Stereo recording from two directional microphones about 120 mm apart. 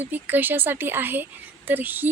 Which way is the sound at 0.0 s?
15° right (ahead or behind).